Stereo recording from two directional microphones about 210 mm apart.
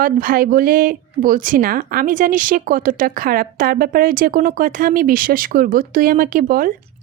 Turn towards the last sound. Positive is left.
turn(degrees=-40)  # may be behind; listen again after turning